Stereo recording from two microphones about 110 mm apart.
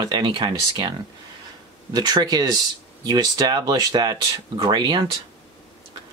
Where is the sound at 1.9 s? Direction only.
40° right (ahead or behind).